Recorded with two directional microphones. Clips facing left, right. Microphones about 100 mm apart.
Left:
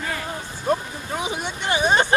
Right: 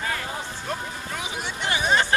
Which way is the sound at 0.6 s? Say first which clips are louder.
Left 13 dB; 25° left (ahead or behind).